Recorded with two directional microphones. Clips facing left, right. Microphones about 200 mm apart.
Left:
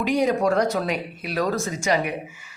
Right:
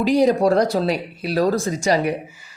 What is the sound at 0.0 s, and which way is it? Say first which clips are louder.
Speech: right 5 dB; 35° right (ahead or behind).